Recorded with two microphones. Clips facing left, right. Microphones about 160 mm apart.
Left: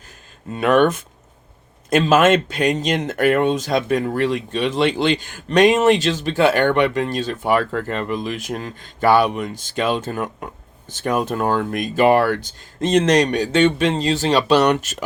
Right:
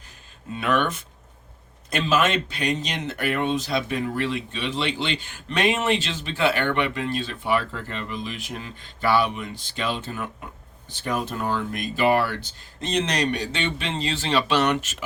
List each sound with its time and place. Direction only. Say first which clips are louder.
0.5 s speech: left 8 dB; 45° left (ahead or behind)